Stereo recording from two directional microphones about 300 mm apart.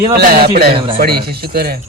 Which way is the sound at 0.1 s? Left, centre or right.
Right.